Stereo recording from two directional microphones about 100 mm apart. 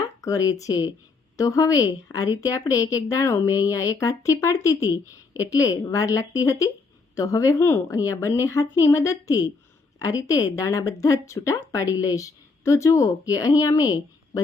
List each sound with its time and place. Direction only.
0.0 s a woman's voice: 35° left (ahead or behind)